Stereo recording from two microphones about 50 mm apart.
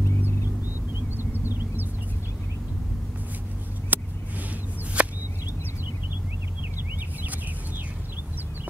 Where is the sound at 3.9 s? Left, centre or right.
Right.